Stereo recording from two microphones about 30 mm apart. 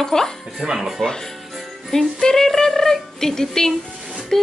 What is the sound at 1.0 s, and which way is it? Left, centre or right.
Speech, left.